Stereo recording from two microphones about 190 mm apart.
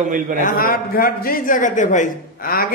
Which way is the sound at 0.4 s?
45° left (ahead or behind).